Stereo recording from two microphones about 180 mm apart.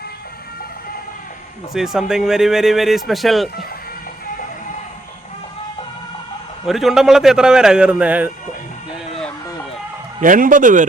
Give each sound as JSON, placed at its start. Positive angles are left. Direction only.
{"t": 1.7, "sound": "speech", "side_deg": 0}
{"t": 6.7, "sound": "speech", "side_deg": 0}
{"t": 10.2, "sound": "speech", "side_deg": -45}